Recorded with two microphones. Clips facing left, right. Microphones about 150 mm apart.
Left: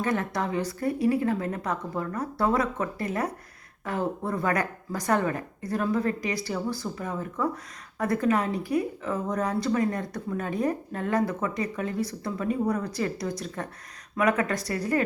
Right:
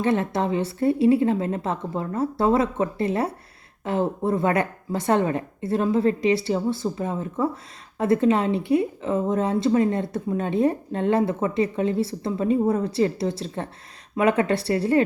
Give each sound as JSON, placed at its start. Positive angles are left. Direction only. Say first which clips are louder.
{"t": 0.0, "sound": "speech", "louder": "right 5 dB", "side_deg": -25}